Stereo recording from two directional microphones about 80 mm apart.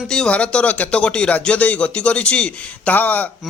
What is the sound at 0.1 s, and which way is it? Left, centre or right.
Speech, centre.